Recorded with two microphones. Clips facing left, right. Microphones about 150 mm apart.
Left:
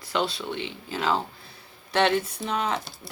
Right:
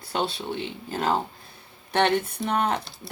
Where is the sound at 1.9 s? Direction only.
55° right (ahead or behind).